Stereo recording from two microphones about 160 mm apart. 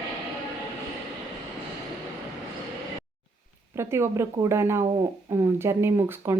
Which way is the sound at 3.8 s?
15° right (ahead or behind).